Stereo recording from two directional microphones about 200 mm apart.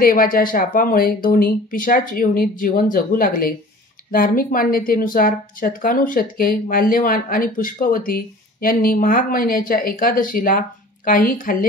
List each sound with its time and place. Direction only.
0.0 s speech: 45° left (ahead or behind)